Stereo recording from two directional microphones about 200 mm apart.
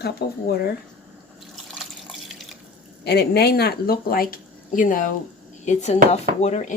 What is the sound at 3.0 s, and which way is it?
Speech, 55° left (ahead or behind).